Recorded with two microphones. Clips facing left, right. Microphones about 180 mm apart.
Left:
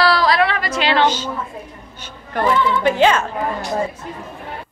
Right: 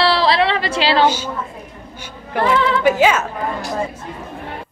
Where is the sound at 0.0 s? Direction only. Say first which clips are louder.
Even; 30° right (ahead or behind).